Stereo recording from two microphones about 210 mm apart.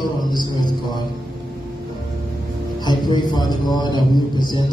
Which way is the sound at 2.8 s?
20° left (ahead or behind).